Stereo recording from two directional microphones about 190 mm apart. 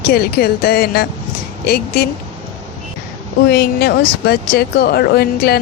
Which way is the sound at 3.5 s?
55° left (ahead or behind).